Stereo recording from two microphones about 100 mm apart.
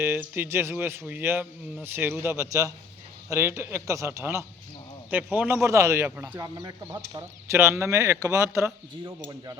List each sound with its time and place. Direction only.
0.0 s speech: 25° right (ahead or behind)
5.6 s speech: 30° right (ahead or behind)
6.6 s speech: 45° right (ahead or behind)
7.4 s speech: 25° right (ahead or behind)